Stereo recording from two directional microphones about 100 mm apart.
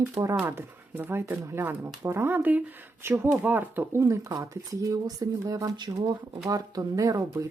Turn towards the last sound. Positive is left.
turn(degrees=-35)  # may be behind; listen again after turning